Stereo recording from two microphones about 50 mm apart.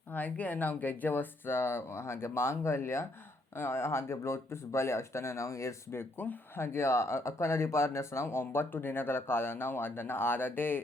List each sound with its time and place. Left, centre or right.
0.1 s speech: left
5.9 s speech: left